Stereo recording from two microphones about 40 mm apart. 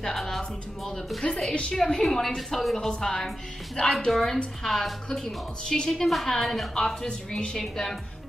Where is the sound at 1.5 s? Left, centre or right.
Left; by 5.5 s centre.